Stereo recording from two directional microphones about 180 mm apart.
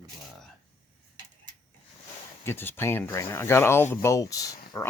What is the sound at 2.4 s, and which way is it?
Speech, 10° left (ahead or behind).